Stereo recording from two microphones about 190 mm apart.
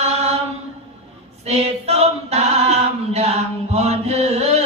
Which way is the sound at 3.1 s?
35° right (ahead or behind).